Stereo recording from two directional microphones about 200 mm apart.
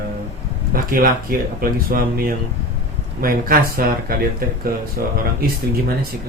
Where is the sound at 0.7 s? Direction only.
45° right (ahead or behind).